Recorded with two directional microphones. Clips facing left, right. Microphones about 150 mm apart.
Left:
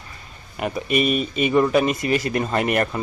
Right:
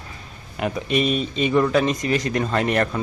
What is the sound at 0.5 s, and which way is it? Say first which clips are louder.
Speech: even; centre (ahead or behind).